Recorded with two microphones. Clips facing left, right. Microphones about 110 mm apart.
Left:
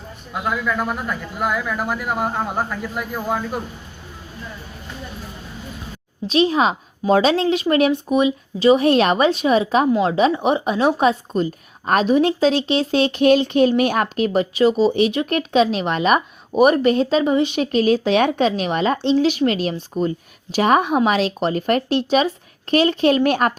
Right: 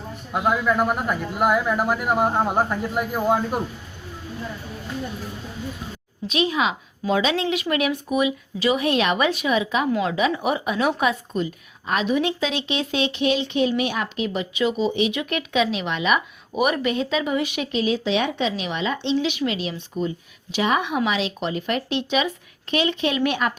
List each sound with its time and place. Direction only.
0.3 s speech: 20° right (ahead or behind)
6.2 s speech: 35° left (ahead or behind)
17.7 s speech: 45° left (ahead or behind)